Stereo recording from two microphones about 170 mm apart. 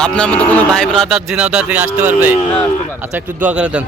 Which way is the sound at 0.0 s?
5° left (ahead or behind).